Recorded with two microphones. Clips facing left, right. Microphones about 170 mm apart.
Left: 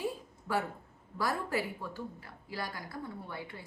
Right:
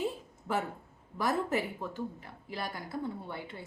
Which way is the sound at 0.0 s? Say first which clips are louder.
Right 2 dB; 20° right (ahead or behind).